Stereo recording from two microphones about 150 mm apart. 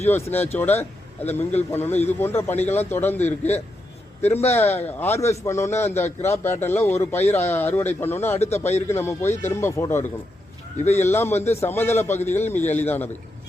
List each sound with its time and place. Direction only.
0.0 s a man's voice: 15° left (ahead or behind)
4.6 s a man's voice: 45° left (ahead or behind)
4.9 s a man's voice: 15° left (ahead or behind)
8.4 s a man's voice: 45° left (ahead or behind)
8.9 s a man's voice: 15° left (ahead or behind)
10.8 s a man's voice: 50° left (ahead or behind)
11.1 s a man's voice: 15° left (ahead or behind)